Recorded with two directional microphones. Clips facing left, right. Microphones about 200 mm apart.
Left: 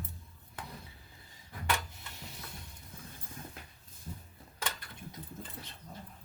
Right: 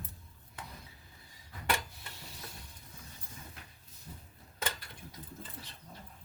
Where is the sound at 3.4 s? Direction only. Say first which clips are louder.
Left 6 dB; 50° left (ahead or behind).